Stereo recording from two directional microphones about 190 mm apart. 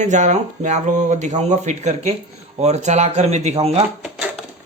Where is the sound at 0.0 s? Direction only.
40° right (ahead or behind).